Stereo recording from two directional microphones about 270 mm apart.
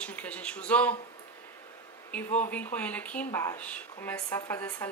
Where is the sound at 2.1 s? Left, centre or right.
Centre.